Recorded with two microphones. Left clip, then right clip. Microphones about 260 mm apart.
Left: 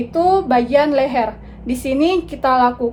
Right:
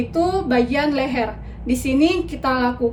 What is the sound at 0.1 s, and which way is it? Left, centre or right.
A woman's voice, centre.